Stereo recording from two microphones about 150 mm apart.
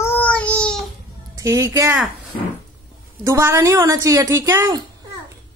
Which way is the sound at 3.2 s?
20° right (ahead or behind).